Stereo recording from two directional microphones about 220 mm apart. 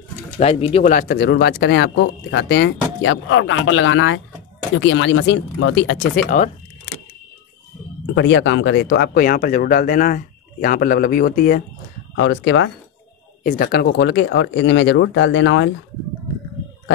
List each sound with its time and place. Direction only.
0.4 s speech: 25° left (ahead or behind); by 5.9 s 60° left (ahead or behind)
6.3 s speech: 35° left (ahead or behind)
8.1 s speech: 55° left (ahead or behind)
12.2 s speech: 55° left (ahead or behind)
13.4 s speech: 40° left (ahead or behind)